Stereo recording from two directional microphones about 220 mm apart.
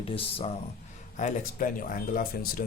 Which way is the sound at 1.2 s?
35° left (ahead or behind).